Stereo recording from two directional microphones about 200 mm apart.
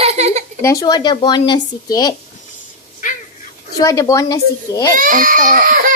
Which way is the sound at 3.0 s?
40° left (ahead or behind).